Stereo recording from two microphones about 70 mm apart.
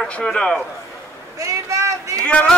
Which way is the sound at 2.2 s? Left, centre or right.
Centre.